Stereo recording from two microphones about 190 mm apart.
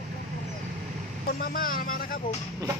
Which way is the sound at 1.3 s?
50° left (ahead or behind).